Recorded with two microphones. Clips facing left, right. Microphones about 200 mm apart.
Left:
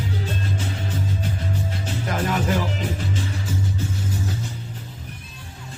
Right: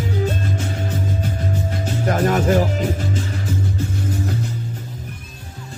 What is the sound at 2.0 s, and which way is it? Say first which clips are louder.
Music: right 7 dB; 45° right (ahead or behind).